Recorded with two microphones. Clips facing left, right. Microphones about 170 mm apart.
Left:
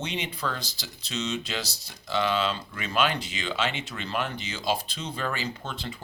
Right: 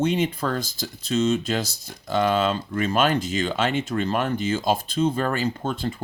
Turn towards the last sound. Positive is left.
turn(degrees=-50)  # may be behind; listen again after turning